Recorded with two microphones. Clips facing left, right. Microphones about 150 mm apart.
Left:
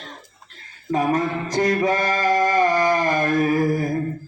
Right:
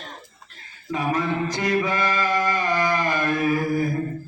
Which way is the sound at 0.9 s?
45° left (ahead or behind).